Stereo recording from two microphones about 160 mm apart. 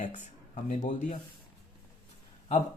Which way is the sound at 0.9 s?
50° left (ahead or behind).